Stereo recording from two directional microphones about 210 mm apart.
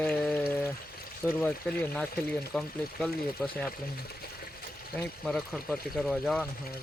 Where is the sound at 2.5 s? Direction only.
5° left (ahead or behind).